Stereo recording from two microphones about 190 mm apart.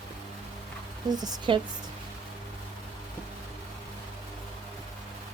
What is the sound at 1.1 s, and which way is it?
Speech, 20° right (ahead or behind).